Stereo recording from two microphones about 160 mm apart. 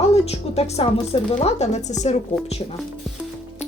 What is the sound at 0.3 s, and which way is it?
A woman's voice, 40° left (ahead or behind).